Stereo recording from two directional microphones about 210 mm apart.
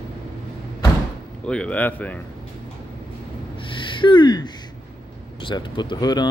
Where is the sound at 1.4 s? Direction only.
5° left (ahead or behind).